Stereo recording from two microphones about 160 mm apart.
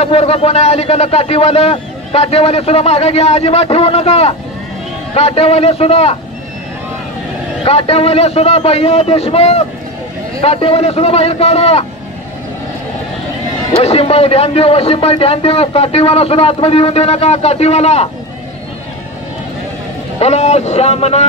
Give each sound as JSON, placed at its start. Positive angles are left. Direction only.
{"t": 0.0, "sound": "a man's voice", "side_deg": 40}
{"t": 7.6, "sound": "a man's voice", "side_deg": 35}
{"t": 13.8, "sound": "a man's voice", "side_deg": 40}
{"t": 20.2, "sound": "a man's voice", "side_deg": 40}